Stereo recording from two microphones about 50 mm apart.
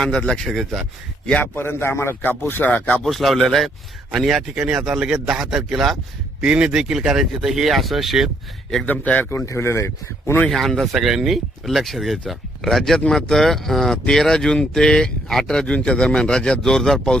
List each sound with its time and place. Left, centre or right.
0.0 s speech: centre
0.4 s speech: centre
1.5 s a man's voice: left
2.4 s a man's voice: left
2.6 s speech: left
3.0 s a man's voice: centre
4.6 s a man's voice: right; by 6.0 s centre
6.4 s speech: right
6.7 s speech: centre
8.9 s speech: left
9.5 s speech: left
10.5 s speech: centre
10.9 s speech: centre
15.6 s speech: left